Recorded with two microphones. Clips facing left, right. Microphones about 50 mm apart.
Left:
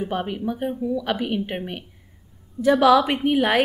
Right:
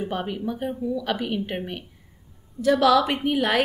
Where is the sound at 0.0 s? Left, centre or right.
Centre.